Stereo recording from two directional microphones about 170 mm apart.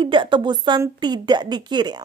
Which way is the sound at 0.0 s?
30° right (ahead or behind).